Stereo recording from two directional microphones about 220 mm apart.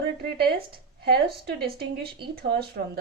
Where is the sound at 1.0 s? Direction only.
45° right (ahead or behind).